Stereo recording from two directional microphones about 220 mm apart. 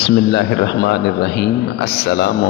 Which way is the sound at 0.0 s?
50° left (ahead or behind).